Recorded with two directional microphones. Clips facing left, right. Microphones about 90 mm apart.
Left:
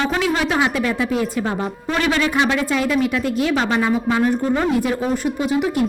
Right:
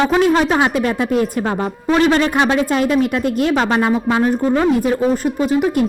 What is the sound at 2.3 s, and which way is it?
A woman's voice, 50° right (ahead or behind).